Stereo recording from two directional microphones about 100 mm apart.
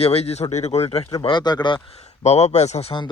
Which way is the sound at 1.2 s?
50° left (ahead or behind).